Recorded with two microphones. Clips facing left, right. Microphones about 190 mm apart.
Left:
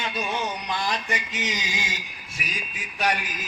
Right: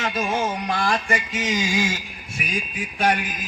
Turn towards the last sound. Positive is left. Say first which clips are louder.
# right 4 dB
turn(degrees=-50)  # may be behind; listen again after turning